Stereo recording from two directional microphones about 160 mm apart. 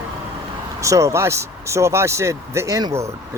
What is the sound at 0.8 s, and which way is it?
Speech, 20° right (ahead or behind).